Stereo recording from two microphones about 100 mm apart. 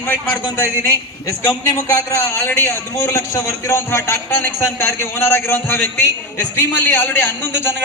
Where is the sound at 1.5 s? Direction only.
30° left (ahead or behind).